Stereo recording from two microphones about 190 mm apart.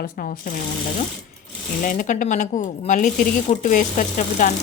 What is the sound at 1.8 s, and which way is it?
Speech, 45° left (ahead or behind).